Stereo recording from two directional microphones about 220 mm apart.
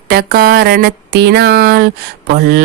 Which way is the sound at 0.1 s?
45° right (ahead or behind).